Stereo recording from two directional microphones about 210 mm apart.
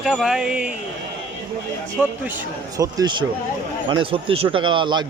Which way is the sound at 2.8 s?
20° right (ahead or behind).